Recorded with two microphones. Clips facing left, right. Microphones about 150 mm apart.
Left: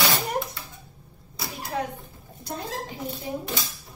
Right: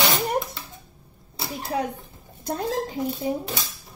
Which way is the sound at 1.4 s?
25° right (ahead or behind).